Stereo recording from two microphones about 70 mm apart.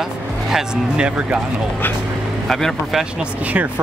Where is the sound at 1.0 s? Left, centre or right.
Centre.